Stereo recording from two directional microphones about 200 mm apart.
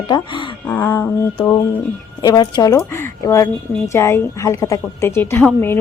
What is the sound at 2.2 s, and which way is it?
A woman's voice, 20° left (ahead or behind).